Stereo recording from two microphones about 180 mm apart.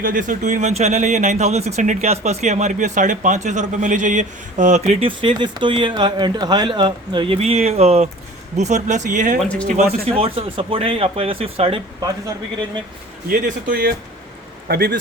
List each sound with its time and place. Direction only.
0.0 s speech: 45° right (ahead or behind)
9.4 s speech: 5° left (ahead or behind)
10.2 s speech: 30° right (ahead or behind)
13.4 s speech: 55° right (ahead or behind)